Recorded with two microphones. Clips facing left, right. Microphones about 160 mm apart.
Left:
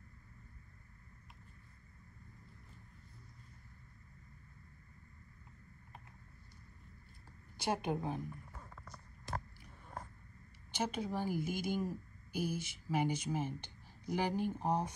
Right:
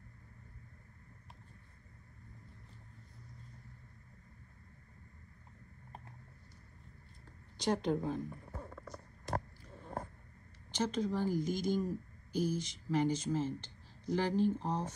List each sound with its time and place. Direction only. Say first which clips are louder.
7.5 s speech: right 3 dB; 5° left (ahead or behind)
8.3 s a sound: right 4 dB; 35° right (ahead or behind)
10.7 s speech: right 3 dB; 10° left (ahead or behind)